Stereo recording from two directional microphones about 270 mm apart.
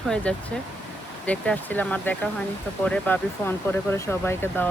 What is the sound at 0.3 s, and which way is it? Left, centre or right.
Speech, centre.